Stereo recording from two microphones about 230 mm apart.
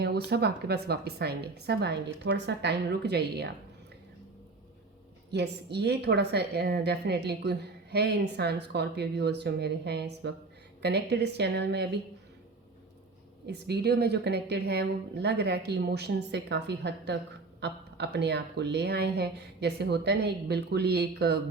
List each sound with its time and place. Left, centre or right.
0.0 s a woman's voice: right
5.3 s a woman's voice: right
13.5 s a woman's voice: right